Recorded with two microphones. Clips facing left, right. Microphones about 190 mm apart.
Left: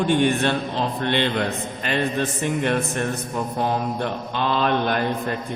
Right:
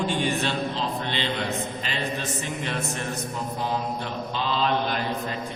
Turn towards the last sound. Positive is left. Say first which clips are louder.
# left 5 dB
turn(degrees=55)  # may be behind; listen again after turning